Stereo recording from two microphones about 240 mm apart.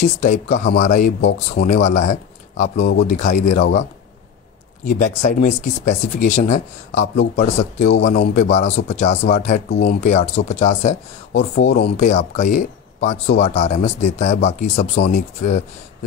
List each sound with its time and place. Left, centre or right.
0.0 s speech: left
2.8 s speech: left
3.1 s speech: left
4.8 s speech: left
11.5 s speech: left